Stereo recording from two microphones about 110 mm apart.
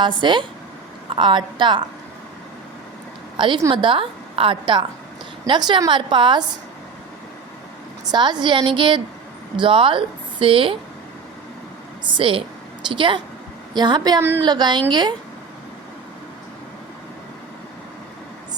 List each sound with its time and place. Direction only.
0.0 s a woman's voice: 45° right (ahead or behind)
3.3 s a woman's voice: 50° right (ahead or behind)
8.1 s a woman's voice: 40° right (ahead or behind)
12.1 s a woman's voice: 55° right (ahead or behind)
14.2 s speech: 20° right (ahead or behind)
14.4 s a woman's voice: 40° right (ahead or behind)